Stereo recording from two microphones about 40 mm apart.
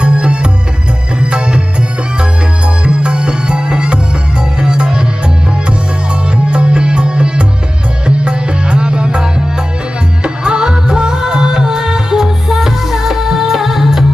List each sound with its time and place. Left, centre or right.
0.0 s music: right
6.3 s music: right; by 14.0 s centre